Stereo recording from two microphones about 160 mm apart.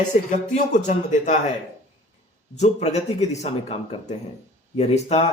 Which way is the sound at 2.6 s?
45° left (ahead or behind).